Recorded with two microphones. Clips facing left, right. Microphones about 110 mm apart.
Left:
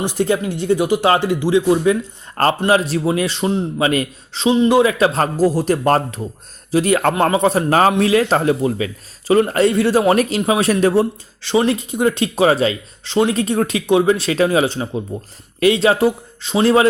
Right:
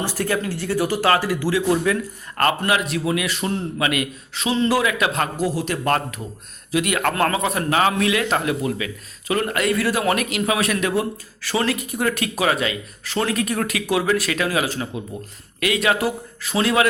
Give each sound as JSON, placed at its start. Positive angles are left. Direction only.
{"t": 0.0, "sound": "speech", "side_deg": 20}
{"t": 3.8, "sound": "a man's voice", "side_deg": 30}
{"t": 4.5, "sound": "speech", "side_deg": 15}
{"t": 4.8, "sound": "a man's voice", "side_deg": 30}
{"t": 7.7, "sound": "a man's voice", "side_deg": 40}